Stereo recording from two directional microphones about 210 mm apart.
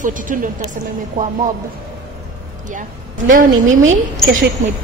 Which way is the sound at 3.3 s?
40° right (ahead or behind).